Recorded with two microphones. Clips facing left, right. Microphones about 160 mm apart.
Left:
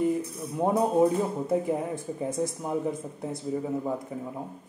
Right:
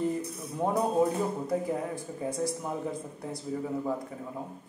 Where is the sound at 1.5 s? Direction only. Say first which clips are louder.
Left 3 dB; 20° left (ahead or behind).